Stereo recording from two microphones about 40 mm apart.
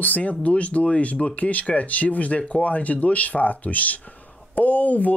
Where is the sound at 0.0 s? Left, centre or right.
Left.